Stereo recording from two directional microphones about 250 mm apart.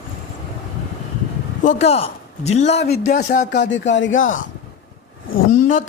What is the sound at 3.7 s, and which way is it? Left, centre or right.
Speech, left.